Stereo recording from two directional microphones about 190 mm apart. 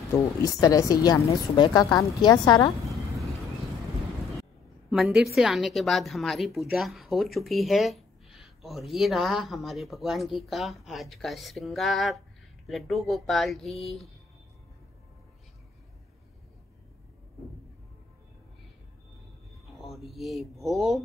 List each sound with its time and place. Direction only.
0.4 s speech: 20° left (ahead or behind)
4.9 s a woman's voice: centre (ahead or behind)
19.7 s speech: centre (ahead or behind)